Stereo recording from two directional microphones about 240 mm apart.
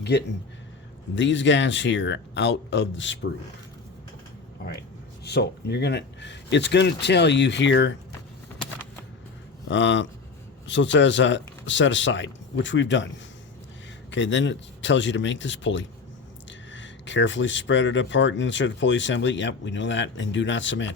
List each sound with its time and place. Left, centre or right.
0.0 s speech: left
5.2 s speech: left
9.6 s speech: left
14.1 s speech: left